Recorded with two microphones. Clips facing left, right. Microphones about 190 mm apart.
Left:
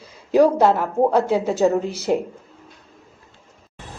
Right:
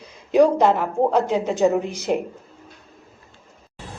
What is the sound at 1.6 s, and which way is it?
Speech, 15° right (ahead or behind).